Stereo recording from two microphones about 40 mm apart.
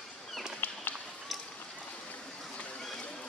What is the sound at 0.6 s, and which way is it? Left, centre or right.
Run, left.